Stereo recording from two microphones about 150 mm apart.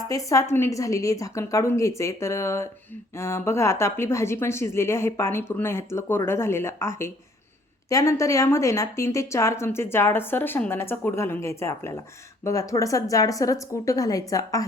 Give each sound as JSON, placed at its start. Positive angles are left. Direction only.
{"t": 0.1, "sound": "a woman's voice", "side_deg": 20}